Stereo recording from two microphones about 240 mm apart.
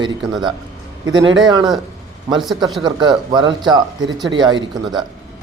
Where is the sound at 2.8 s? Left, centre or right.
Centre.